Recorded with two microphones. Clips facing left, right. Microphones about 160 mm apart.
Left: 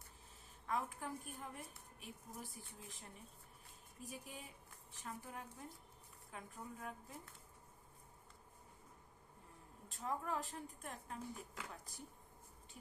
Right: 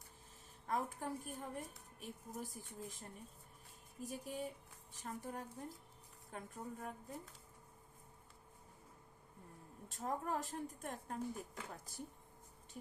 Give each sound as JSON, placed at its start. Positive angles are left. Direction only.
{"t": 0.7, "sound": "a woman's voice", "side_deg": -40}
{"t": 4.0, "sound": "a woman's voice", "side_deg": -40}
{"t": 9.9, "sound": "a woman's voice", "side_deg": -45}